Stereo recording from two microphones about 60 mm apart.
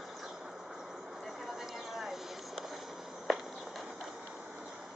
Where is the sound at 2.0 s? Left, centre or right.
Centre.